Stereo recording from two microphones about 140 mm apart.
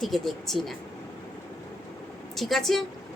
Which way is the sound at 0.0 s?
Centre (ahead or behind).